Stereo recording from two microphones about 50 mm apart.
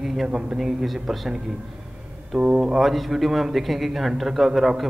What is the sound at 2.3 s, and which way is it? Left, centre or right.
Speech, centre.